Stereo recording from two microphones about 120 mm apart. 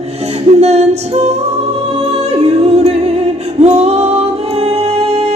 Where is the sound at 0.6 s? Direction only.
60° right (ahead or behind).